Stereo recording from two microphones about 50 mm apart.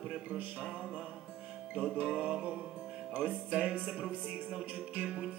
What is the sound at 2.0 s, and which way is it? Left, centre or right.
Music, centre.